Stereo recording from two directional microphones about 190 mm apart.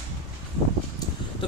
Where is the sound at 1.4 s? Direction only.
25° left (ahead or behind).